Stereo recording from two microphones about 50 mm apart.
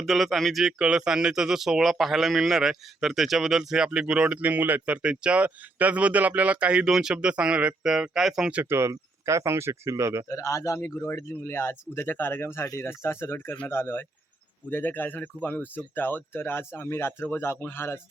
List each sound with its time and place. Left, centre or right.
0.0 s speech: centre
0.6 s speech: centre
4.4 s speech: right
5.0 s speech: right
6.8 s speech: centre
7.9 s speech: centre
8.7 s speech: right
10.2 s speech: left
11.0 s speech: left
11.4 s speech: left
14.7 s speech: left